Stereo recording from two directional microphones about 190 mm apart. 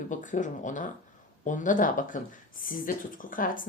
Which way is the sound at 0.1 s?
40° left (ahead or behind).